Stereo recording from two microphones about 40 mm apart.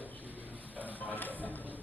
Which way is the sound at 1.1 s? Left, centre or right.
Left.